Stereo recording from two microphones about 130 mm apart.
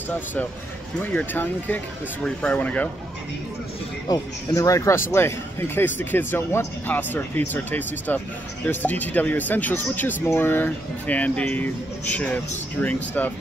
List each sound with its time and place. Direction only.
0.1 s speech: 15° left (ahead or behind)
4.1 s speech: 25° left (ahead or behind)